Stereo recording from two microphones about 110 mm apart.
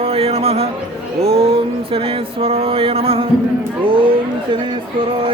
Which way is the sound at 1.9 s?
55° right (ahead or behind).